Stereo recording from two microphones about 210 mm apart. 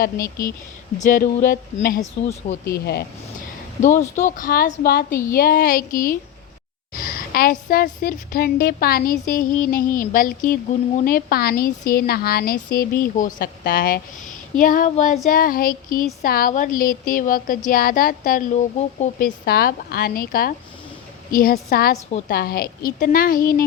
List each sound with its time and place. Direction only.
0.2 s speech: 15° left (ahead or behind)
0.9 s a woman's voice: 40° left (ahead or behind)
2.7 s a woman's voice: 50° left (ahead or behind)
3.8 s a woman's voice: 35° left (ahead or behind)
5.1 s speech: 15° left (ahead or behind)
5.4 s a woman's voice: 45° left (ahead or behind)
19.5 s a woman's voice: 45° left (ahead or behind)